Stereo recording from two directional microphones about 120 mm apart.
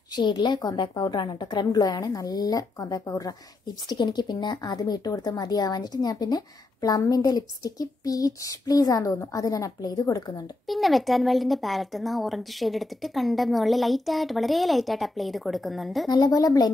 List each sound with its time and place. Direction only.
0.1 s speech: 40° left (ahead or behind)
10.7 s speech: centre (ahead or behind)
16.1 s speech: 35° left (ahead or behind)